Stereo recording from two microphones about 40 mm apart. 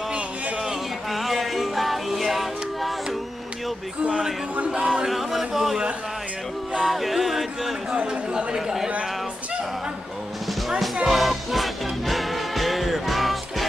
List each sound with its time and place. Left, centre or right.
1.1 s music: centre
4.6 s speech: right
5.0 s a sound: centre
6.8 s music: centre
7.9 s speech: right
11.1 s music: centre